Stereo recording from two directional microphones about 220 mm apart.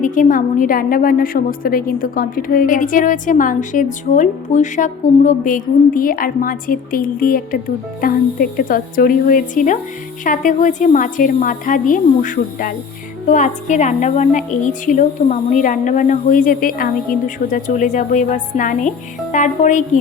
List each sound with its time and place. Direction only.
0.0 s a woman's voice: 35° left (ahead or behind)